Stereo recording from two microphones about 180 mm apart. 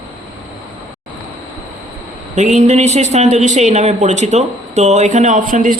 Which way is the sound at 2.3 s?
40° right (ahead or behind).